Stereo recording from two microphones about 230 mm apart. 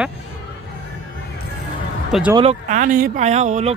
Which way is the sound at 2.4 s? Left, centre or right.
Right.